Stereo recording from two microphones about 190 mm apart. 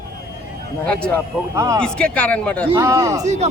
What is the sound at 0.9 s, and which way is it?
Speech, 5° left (ahead or behind).